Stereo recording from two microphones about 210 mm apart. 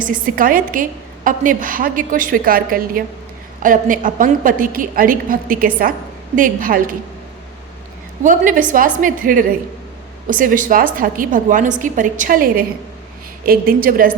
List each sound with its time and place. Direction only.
0.0 s a woman's voice: 40° right (ahead or behind)
8.2 s a woman's voice: 40° right (ahead or behind)